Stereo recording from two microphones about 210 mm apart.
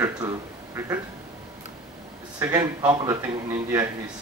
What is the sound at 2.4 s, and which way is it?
Speech, 20° right (ahead or behind).